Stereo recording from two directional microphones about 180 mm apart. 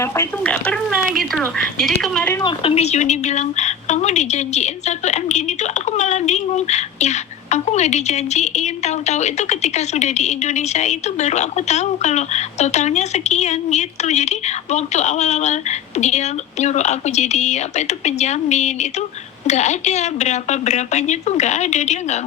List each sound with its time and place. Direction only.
0.0 s speech: 15° left (ahead or behind)
2.3 s a woman's voice: 25° left (ahead or behind)